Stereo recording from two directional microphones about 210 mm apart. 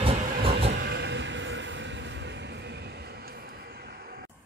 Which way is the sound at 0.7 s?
55° right (ahead or behind).